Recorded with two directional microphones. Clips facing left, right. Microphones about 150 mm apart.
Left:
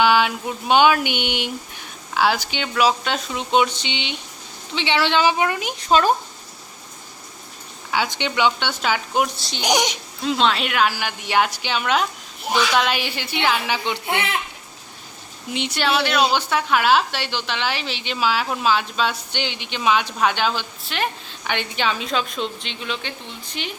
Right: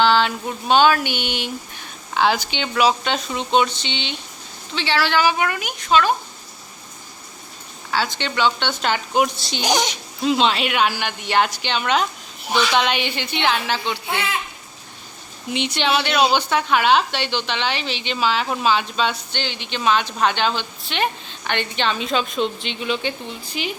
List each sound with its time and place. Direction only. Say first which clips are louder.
0.0 s speech: even; 10° left (ahead or behind)
2.1 s a woman's voice: right 1 dB; 5° left (ahead or behind); by 6.1 s 40° left (ahead or behind)
7.9 s speech: even; 15° left (ahead or behind); by 9.6 s centre (ahead or behind)
9.6 s speech: even; 15° left (ahead or behind)
10.2 s a woman's voice: right 2 dB; centre (ahead or behind); by 14.0 s 15° left (ahead or behind)
15.5 s a woman's voice: right 1 dB; centre (ahead or behind)
19.3 s a woman's voice: even; 15° left (ahead or behind); by 23.7 s 5° right (ahead or behind)